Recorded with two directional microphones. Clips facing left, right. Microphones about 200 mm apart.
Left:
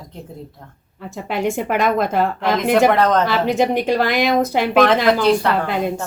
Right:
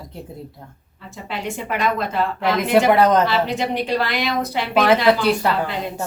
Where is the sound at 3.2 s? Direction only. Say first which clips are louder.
Left 4 dB; 45° left (ahead or behind).